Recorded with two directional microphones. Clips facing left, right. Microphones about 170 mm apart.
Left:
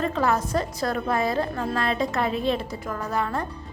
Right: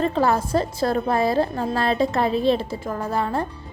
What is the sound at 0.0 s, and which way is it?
A woman's voice, 30° right (ahead or behind).